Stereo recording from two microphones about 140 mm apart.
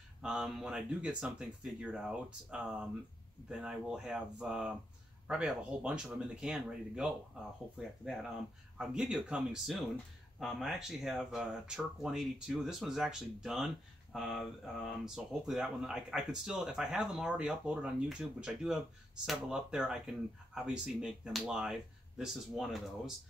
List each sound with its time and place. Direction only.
0.2 s speech: 5° right (ahead or behind)
8.7 s speech: 5° right (ahead or behind)